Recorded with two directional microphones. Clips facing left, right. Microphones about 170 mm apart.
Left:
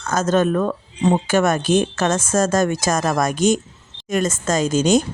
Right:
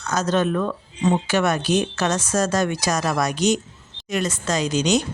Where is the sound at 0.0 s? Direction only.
50° left (ahead or behind).